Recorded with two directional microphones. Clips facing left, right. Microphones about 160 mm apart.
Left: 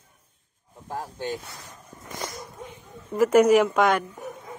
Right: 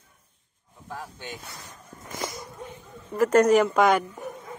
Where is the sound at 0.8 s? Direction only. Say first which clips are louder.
Left 4 dB; 45° left (ahead or behind).